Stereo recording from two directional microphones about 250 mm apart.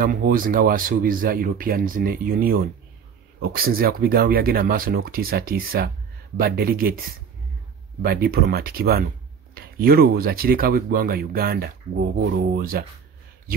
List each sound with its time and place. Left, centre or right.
0.0 s speech: right
8.0 s speech: right